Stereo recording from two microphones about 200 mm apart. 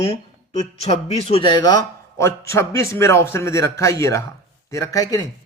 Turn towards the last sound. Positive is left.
turn(degrees=20)  # may be behind; listen again after turning